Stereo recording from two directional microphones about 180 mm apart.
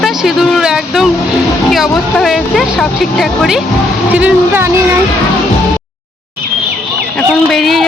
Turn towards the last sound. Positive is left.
turn(degrees=0)  # may be behind; listen again after turning